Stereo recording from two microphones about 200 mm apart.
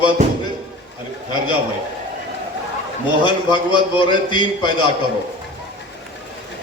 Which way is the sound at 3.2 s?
25° left (ahead or behind).